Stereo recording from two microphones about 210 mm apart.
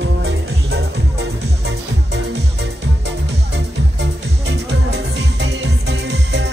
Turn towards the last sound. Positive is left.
turn(degrees=-55)  # may be behind; listen again after turning